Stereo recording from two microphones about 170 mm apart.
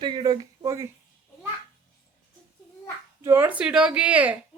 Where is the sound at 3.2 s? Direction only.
15° right (ahead or behind).